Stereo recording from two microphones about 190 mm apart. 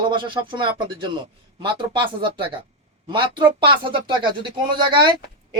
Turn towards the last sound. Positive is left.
turn(degrees=-25)  # may be behind; listen again after turning